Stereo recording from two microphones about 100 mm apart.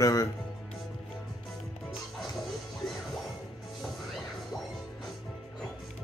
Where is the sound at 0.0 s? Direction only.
35° left (ahead or behind).